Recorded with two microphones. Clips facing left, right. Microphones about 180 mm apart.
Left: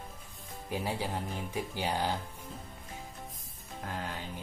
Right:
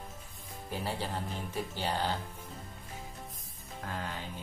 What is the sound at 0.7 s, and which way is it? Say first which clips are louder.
Speech: left 2 dB; 15° left (ahead or behind).